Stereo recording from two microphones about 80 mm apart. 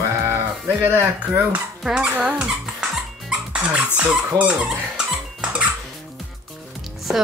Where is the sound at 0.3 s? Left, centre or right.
Right.